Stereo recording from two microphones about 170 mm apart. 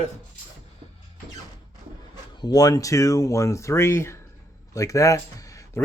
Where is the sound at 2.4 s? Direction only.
20° left (ahead or behind).